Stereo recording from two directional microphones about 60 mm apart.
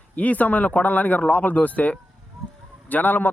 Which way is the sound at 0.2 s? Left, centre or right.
Left.